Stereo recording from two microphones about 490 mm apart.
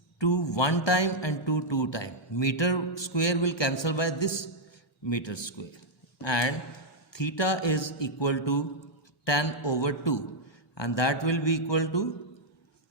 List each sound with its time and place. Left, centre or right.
0.2 s speech: left